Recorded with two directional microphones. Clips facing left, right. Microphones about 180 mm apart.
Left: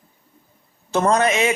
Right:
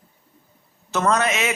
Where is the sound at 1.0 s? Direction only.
30° left (ahead or behind).